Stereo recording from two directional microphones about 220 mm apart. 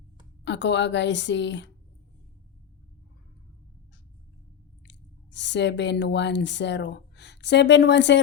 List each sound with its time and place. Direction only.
0.4 s a woman's voice: 55° left (ahead or behind)
4.9 s speech: 55° left (ahead or behind)